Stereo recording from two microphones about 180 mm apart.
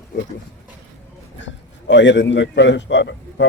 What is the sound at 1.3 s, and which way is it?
A man's voice, 85° left.